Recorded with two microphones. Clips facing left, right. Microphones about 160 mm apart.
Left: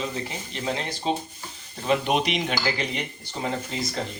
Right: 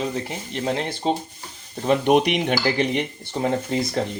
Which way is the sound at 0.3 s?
50° right (ahead or behind).